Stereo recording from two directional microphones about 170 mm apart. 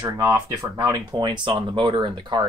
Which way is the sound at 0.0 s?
20° right (ahead or behind).